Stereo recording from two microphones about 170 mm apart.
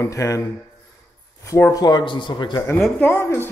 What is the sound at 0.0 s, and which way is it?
Speech, 20° left (ahead or behind).